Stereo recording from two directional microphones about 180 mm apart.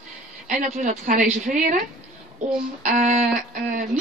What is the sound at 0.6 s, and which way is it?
A woman's voice, 45° right (ahead or behind).